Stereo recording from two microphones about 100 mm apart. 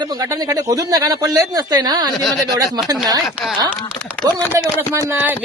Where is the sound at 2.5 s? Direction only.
40° right (ahead or behind).